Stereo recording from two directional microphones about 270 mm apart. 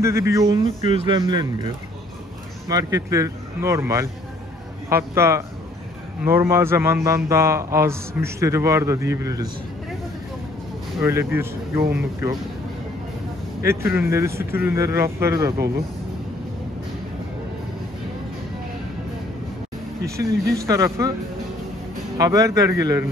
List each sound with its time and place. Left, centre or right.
0.0 s speech: centre
2.7 s speech: centre
11.0 s speech: centre
13.6 s speech: centre
20.6 s speech: centre
22.1 s speech: centre